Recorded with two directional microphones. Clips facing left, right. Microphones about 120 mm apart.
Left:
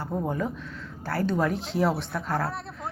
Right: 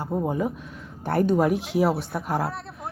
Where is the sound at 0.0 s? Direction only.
15° right (ahead or behind).